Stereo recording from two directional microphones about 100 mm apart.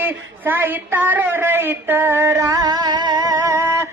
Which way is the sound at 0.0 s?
20° right (ahead or behind).